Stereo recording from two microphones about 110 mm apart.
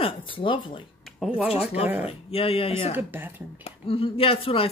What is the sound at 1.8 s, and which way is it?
Speech, 15° right (ahead or behind).